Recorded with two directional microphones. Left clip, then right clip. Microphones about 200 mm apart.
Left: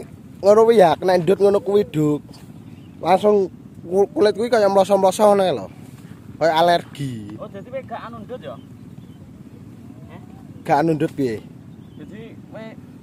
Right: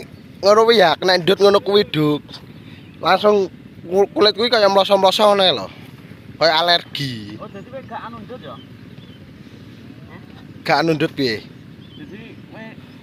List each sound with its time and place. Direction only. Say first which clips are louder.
0.4 s speech: even; 15° left (ahead or behind)
10.6 s speech: right 1 dB; 15° left (ahead or behind)